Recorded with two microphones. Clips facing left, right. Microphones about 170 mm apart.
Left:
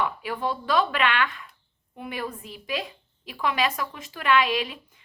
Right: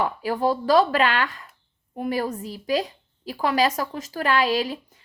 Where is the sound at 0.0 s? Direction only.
40° right (ahead or behind).